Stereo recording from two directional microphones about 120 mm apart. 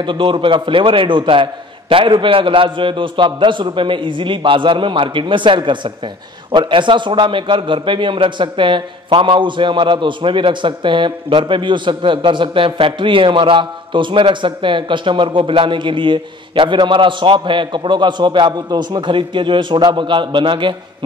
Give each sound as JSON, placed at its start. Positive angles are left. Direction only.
{"t": 0.0, "sound": "a man's voice", "side_deg": -45}